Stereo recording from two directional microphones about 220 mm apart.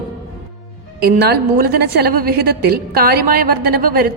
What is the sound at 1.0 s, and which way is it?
A woman's voice, 45° right (ahead or behind).